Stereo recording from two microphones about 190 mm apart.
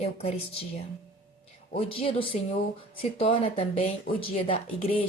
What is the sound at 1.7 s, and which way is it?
A woman's voice, 30° left (ahead or behind).